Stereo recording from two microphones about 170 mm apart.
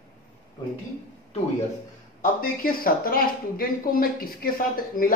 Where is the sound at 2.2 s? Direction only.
60° left (ahead or behind).